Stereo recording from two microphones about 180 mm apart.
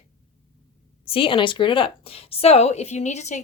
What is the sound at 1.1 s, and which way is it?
Speech, 30° left (ahead or behind).